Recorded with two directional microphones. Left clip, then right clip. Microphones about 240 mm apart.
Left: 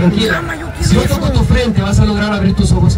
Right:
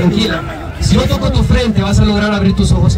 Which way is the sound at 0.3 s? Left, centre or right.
Left.